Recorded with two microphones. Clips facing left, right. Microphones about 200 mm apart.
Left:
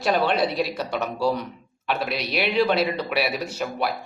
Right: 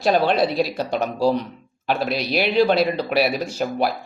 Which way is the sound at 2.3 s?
35° right (ahead or behind).